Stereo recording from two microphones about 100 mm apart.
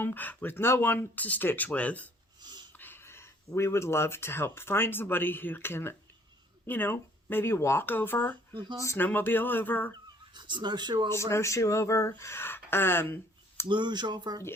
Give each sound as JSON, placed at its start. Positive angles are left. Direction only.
{"t": 0.0, "sound": "speech", "side_deg": 20}
{"t": 2.4, "sound": "a sound", "side_deg": -45}
{"t": 2.7, "sound": "speech", "side_deg": 20}
{"t": 10.3, "sound": "speech", "side_deg": -50}
{"t": 11.1, "sound": "speech", "side_deg": 25}
{"t": 13.7, "sound": "speech", "side_deg": -50}